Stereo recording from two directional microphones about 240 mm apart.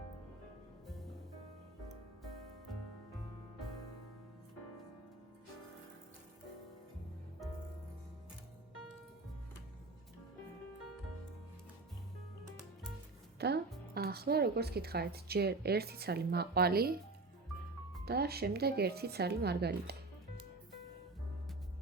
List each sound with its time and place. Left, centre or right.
13.4 s speech: right
18.0 s speech: right